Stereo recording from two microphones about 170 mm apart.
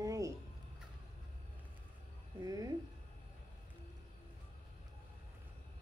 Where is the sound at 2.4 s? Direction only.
20° right (ahead or behind).